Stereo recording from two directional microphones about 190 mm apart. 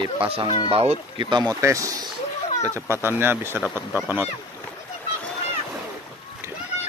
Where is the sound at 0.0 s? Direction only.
25° right (ahead or behind); by 4.3 s 10° right (ahead or behind).